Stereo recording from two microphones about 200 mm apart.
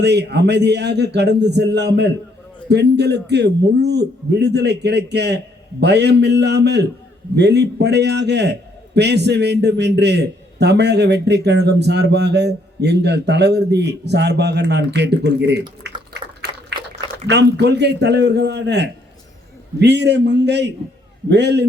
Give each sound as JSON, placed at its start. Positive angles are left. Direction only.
{"t": 0.0, "sound": "a man's voice", "side_deg": -55}
{"t": 16.1, "sound": "a sound", "side_deg": -55}
{"t": 17.1, "sound": "a man's voice", "side_deg": -55}